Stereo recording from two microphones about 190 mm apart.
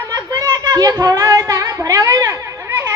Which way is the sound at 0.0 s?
20° right (ahead or behind).